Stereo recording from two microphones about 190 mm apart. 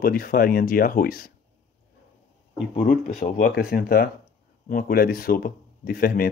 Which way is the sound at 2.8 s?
40° left (ahead or behind).